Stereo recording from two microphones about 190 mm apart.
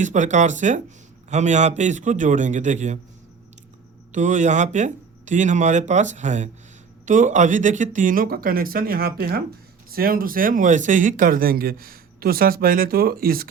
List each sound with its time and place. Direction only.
0.0 s speech: 40° right (ahead or behind)
4.1 s speech: 40° right (ahead or behind)